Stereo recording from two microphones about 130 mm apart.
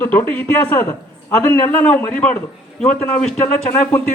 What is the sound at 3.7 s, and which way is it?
Speech, 20° left (ahead or behind).